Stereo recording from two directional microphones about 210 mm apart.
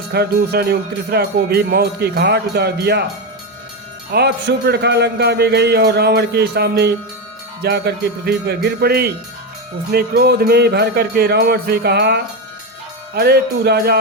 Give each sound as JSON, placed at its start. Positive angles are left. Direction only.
{"t": 0.1, "sound": "music", "side_deg": -50}
{"t": 4.1, "sound": "music", "side_deg": -55}